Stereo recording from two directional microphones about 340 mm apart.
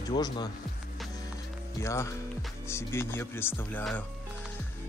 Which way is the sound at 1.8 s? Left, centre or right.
Centre.